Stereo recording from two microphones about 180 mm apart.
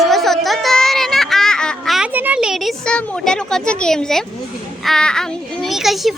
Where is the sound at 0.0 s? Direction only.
Centre (ahead or behind).